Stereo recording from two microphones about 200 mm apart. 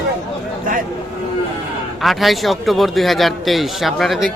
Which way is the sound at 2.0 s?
Centre (ahead or behind).